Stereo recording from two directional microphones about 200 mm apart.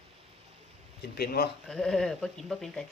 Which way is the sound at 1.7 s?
Centre (ahead or behind).